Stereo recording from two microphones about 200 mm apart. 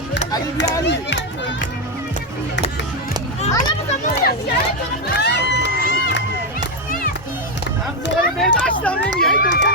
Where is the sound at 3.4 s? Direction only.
35° left (ahead or behind).